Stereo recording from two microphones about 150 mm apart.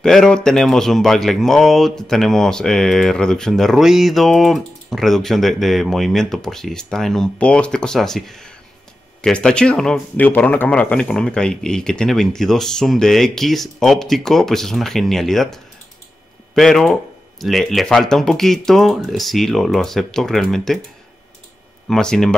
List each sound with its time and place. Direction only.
0.0 s speech: 5° left (ahead or behind)
21.8 s speech: 5° left (ahead or behind)